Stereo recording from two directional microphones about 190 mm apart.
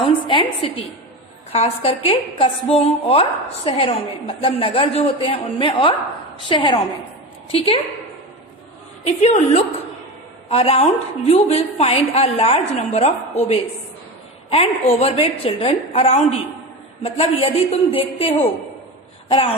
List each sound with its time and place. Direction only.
0.0 s a woman's voice: 25° left (ahead or behind)
9.0 s a woman's voice: 35° left (ahead or behind)